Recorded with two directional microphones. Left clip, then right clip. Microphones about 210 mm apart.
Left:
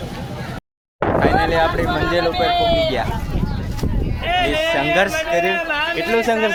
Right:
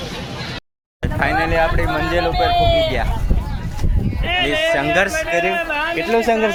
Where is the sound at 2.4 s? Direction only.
25° right (ahead or behind).